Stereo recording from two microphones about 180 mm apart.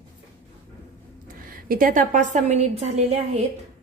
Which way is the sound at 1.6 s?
50° right (ahead or behind).